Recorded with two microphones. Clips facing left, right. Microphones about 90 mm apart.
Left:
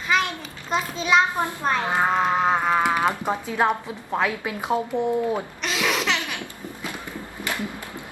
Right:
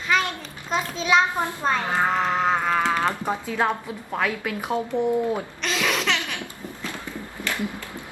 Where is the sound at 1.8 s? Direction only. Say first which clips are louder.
Left 1 dB; 20° left (ahead or behind).